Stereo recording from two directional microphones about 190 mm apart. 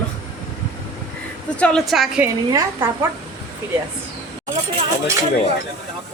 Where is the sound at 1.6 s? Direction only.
Centre (ahead or behind).